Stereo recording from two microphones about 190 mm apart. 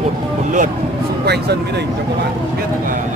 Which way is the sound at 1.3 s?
60° right (ahead or behind).